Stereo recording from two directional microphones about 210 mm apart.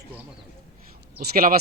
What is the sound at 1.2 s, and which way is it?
Speech, 45° right (ahead or behind).